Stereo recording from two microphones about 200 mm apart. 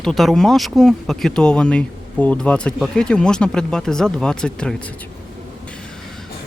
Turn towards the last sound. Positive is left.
turn(degrees=5)  # may be behind; listen again after turning